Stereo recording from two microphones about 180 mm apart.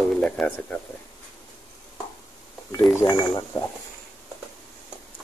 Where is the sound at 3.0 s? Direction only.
20° left (ahead or behind).